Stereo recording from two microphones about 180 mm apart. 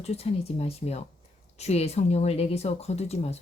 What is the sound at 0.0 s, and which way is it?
Speech, 35° left (ahead or behind).